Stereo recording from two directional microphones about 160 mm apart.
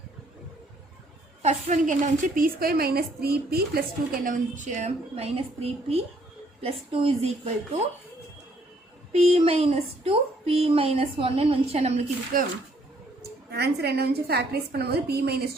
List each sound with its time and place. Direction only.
1.4 s a woman's voice: 45° right (ahead or behind)
9.1 s speech: 40° right (ahead or behind)
12.3 s speech: 60° right (ahead or behind)
13.5 s a woman's voice: 90° right